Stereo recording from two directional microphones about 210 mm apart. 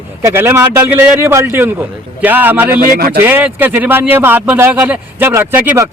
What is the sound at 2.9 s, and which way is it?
Speech, 45° right (ahead or behind).